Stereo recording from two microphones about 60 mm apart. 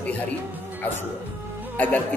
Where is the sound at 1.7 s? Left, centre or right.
Left.